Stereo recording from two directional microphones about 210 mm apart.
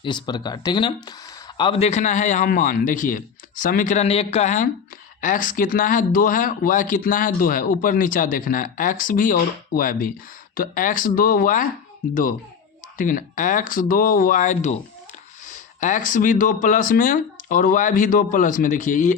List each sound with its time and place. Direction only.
0.0 s speech: 20° left (ahead or behind); by 11.7 s 40° left (ahead or behind)
13.0 s speech: 40° left (ahead or behind)